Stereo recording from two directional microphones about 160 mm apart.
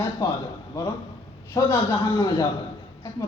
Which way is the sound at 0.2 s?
20° left (ahead or behind).